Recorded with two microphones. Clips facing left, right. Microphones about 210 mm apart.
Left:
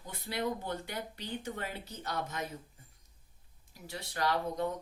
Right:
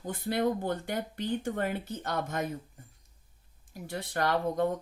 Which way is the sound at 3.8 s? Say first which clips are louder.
Right 5 dB; 50° right (ahead or behind).